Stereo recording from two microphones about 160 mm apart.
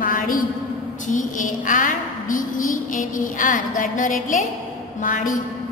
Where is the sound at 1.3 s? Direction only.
55° left (ahead or behind).